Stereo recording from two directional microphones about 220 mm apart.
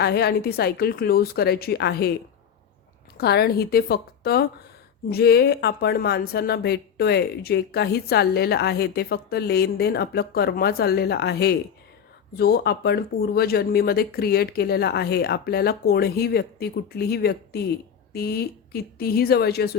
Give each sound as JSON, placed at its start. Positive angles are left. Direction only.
{"t": 0.0, "sound": "speech", "side_deg": 45}
{"t": 3.2, "sound": "speech", "side_deg": 45}